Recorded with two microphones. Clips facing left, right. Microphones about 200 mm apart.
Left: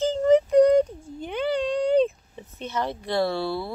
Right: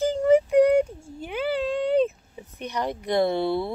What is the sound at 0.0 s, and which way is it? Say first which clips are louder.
Child singing: even; 10° right (ahead or behind).